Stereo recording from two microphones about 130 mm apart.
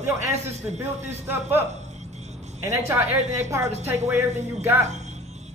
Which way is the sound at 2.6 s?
20° right (ahead or behind).